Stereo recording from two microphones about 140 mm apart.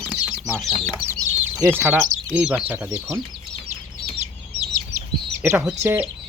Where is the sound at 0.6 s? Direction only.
Centre (ahead or behind).